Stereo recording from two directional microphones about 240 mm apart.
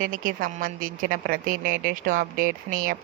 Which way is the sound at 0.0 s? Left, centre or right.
Right.